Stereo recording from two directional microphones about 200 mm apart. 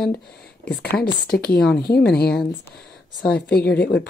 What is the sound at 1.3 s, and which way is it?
Speech, 55° left (ahead or behind).